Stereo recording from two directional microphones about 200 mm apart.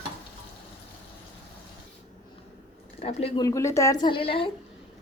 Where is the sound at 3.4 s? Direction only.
15° left (ahead or behind).